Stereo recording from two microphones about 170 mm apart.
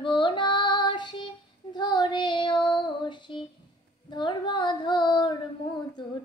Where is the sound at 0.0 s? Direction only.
30° left (ahead or behind).